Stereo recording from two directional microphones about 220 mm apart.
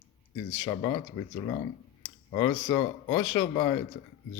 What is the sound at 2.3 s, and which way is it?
A man's voice, 15° left (ahead or behind).